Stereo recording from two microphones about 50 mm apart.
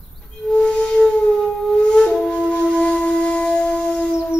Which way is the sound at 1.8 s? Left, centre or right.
Centre.